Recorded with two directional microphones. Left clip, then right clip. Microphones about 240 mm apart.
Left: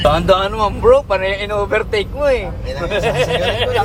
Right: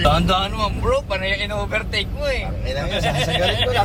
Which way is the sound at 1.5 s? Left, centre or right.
Left.